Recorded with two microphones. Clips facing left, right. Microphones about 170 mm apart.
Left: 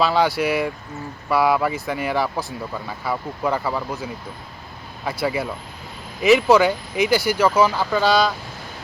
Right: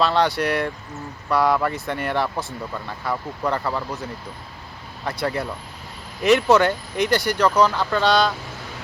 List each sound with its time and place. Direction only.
0.0 s speech: 5° left (ahead or behind)